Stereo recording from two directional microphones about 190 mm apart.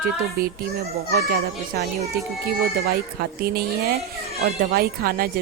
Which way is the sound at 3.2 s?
55° right (ahead or behind).